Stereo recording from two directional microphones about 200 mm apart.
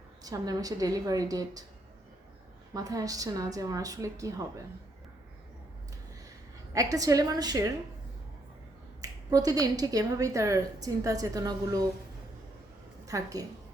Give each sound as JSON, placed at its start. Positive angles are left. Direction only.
{"t": 0.2, "sound": "speech", "side_deg": -20}
{"t": 2.7, "sound": "speech", "side_deg": -15}
{"t": 6.7, "sound": "speech", "side_deg": -15}
{"t": 9.0, "sound": "speech", "side_deg": -15}
{"t": 13.1, "sound": "a woman's voice", "side_deg": -15}